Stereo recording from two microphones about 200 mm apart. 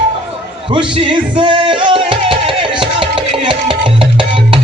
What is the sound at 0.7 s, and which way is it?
Music, 25° right (ahead or behind).